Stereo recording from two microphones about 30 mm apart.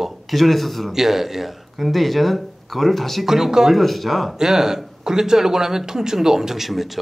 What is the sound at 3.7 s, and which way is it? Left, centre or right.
Speech, centre.